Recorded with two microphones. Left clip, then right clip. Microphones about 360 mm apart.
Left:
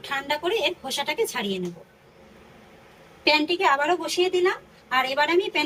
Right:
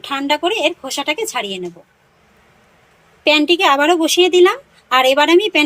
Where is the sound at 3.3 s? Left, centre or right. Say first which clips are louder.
Right 8 dB; centre.